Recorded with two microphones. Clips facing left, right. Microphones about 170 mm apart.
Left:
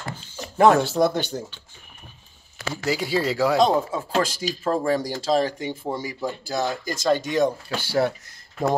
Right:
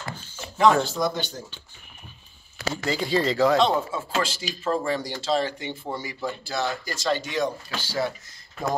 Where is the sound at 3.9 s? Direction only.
40° left (ahead or behind).